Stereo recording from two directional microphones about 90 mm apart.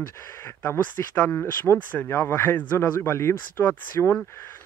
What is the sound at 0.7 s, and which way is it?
Speech, 25° left (ahead or behind).